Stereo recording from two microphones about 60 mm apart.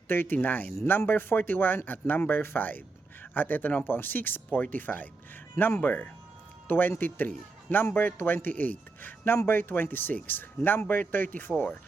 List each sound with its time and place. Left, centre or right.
0.1 s speech: left